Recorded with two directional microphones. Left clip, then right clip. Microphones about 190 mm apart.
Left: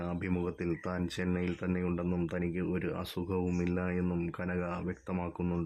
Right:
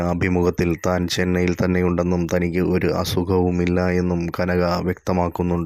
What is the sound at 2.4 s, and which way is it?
Speech, 35° right (ahead or behind).